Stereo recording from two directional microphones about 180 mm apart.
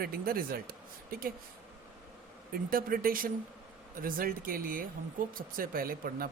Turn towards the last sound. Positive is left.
turn(degrees=-55)  # may be behind; listen again after turning